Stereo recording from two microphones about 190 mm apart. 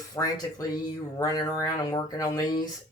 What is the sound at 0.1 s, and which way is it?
Speech, 20° left (ahead or behind).